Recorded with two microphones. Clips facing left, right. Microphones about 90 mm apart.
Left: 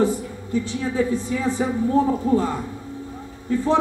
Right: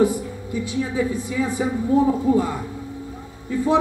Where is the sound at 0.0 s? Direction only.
15° right (ahead or behind).